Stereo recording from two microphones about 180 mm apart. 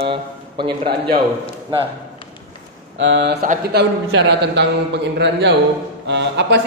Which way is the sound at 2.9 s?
90° right.